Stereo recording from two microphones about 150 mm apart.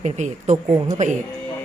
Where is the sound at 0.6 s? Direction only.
30° right (ahead or behind).